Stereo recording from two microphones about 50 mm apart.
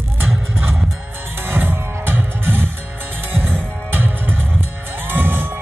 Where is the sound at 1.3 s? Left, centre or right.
Right.